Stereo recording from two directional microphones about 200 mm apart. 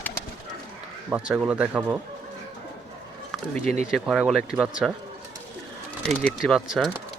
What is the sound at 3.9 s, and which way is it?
Speech, centre (ahead or behind).